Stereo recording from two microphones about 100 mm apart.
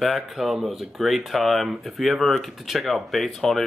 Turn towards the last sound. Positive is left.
turn(degrees=0)  # may be behind; listen again after turning